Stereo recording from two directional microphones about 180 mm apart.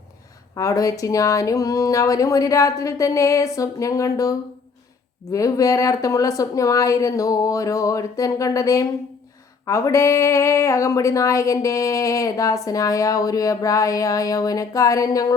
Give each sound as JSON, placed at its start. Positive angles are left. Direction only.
{"t": 0.5, "sound": "speech", "side_deg": 20}